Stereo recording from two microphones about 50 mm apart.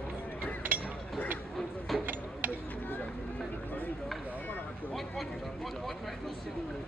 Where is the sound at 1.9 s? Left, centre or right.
Centre.